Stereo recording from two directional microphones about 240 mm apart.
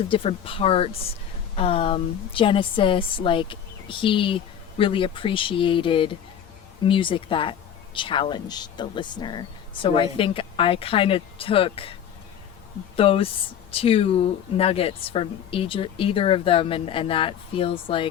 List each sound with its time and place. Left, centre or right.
0.1 s speech: left
13.0 s speech: left